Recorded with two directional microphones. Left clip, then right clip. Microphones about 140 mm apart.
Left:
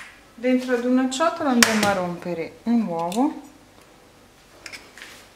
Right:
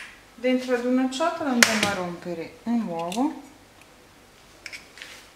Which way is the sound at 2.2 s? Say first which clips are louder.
Left 4 dB; 20° left (ahead or behind).